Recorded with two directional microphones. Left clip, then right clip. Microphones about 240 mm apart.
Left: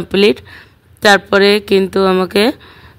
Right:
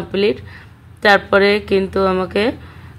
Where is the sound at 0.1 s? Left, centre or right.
Left.